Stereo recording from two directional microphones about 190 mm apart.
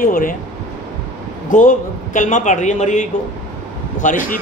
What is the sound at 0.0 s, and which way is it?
Speech, 45° left (ahead or behind).